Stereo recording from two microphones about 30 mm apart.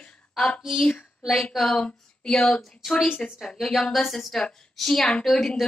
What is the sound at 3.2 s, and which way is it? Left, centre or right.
Speech, left.